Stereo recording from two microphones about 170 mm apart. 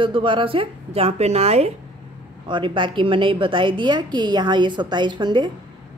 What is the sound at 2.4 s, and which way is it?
A woman's voice, 30° right (ahead or behind).